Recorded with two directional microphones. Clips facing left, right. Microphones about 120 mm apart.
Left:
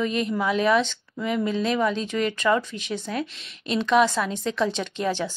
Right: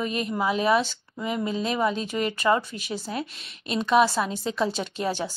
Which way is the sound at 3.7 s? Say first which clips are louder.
Left 1 dB; 35° right (ahead or behind).